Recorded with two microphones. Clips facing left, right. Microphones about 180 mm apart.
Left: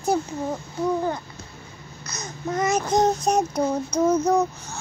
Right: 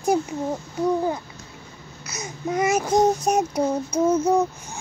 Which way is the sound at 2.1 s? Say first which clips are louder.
Right 2 dB; 10° right (ahead or behind).